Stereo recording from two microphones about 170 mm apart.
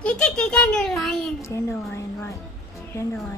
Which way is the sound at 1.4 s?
15° left (ahead or behind).